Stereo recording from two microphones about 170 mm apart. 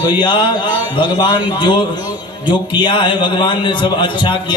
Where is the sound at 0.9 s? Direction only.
25° left (ahead or behind).